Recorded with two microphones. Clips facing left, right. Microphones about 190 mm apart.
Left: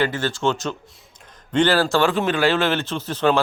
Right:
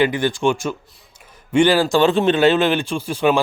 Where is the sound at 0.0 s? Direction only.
15° right (ahead or behind).